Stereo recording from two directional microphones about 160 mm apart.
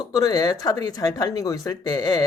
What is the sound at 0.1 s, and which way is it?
Speech, 25° left (ahead or behind).